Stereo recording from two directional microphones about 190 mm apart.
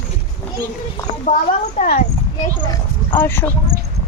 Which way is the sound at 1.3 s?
45° left (ahead or behind).